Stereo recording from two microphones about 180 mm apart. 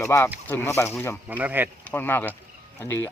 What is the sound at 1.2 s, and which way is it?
Speech, 10° right (ahead or behind).